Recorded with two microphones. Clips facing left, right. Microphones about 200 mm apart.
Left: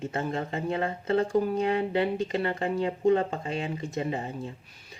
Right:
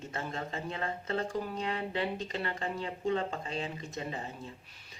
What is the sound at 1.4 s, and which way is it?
Speech, 50° left (ahead or behind).